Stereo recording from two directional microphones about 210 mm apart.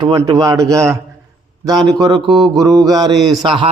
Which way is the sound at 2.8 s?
20° right (ahead or behind).